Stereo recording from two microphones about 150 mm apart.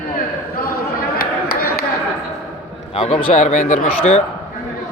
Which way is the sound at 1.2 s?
90° left.